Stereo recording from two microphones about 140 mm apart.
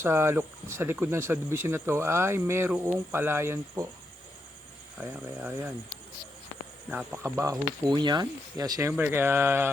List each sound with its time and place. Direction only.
0.0 s speech: 20° right (ahead or behind)
4.9 s speech: 10° right (ahead or behind)
6.9 s speech: 15° right (ahead or behind)
7.9 s speech: 30° right (ahead or behind)
8.9 s speech: 15° right (ahead or behind)